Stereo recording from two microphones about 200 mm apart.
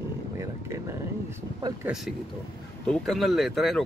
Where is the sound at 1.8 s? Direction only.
Centre (ahead or behind).